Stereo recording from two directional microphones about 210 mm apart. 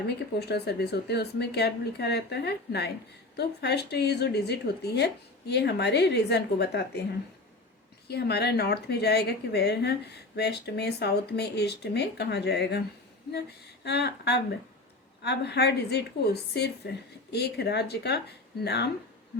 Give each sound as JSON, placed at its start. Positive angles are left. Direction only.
{"t": 0.2, "sound": "speech", "side_deg": 50}
{"t": 8.0, "sound": "speech", "side_deg": 50}
{"t": 13.8, "sound": "speech", "side_deg": 50}